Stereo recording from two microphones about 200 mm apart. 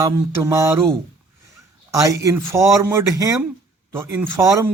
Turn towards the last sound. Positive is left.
turn(degrees=-15)  # may be behind; listen again after turning